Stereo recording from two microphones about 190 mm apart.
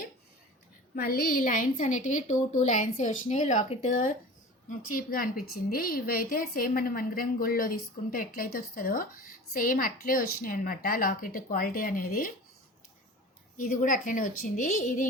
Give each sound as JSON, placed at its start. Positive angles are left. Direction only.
{"t": 0.9, "sound": "a woman's voice", "side_deg": 50}
{"t": 13.6, "sound": "a woman's voice", "side_deg": 45}